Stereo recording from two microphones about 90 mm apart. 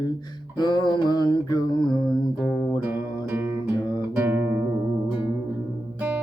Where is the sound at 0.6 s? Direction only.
55° left (ahead or behind).